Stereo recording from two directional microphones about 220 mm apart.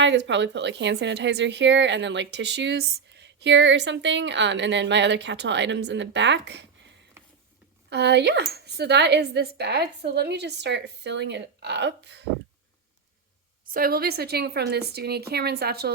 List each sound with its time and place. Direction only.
0.0 s a woman's voice: 55° right (ahead or behind)
7.2 s a sound: 10° right (ahead or behind)
7.9 s a woman's voice: 50° right (ahead or behind)
13.7 s a woman's voice: 40° right (ahead or behind)